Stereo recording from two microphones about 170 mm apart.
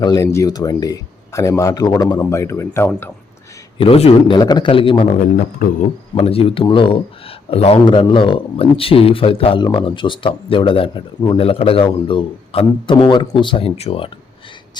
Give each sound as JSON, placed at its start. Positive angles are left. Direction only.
{"t": 0.0, "sound": "speech", "side_deg": 20}
{"t": 3.8, "sound": "speech", "side_deg": 35}
{"t": 6.1, "sound": "speech", "side_deg": 35}